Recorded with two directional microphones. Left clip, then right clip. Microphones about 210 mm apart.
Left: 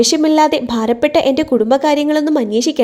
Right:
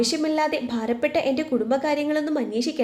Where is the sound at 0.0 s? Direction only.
40° left (ahead or behind).